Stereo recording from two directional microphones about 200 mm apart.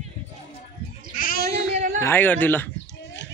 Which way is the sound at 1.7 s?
40° right (ahead or behind).